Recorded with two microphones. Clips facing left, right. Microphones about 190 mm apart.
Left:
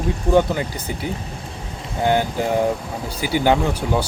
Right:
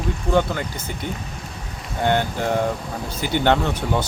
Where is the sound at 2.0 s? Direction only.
10° left (ahead or behind).